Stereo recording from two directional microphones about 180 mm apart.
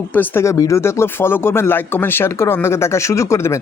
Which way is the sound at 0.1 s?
10° left (ahead or behind).